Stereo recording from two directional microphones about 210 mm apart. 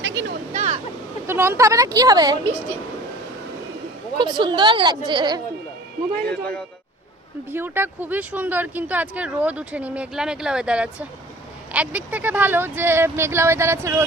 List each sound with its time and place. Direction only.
0.0 s a sound: 60° right (ahead or behind)
0.5 s a sound: 30° right (ahead or behind)
1.3 s speech: 10° right (ahead or behind)
4.2 s speech: 20° right (ahead or behind)
6.2 s a man's voice: 5° left (ahead or behind)
7.5 s speech: 10° right (ahead or behind)